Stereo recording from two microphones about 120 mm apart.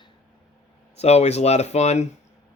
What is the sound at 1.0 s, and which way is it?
Speech, 60° left (ahead or behind).